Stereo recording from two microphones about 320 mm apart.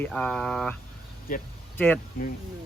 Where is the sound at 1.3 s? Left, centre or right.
Left.